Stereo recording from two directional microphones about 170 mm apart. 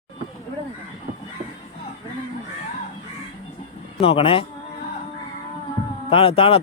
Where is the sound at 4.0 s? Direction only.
35° left (ahead or behind).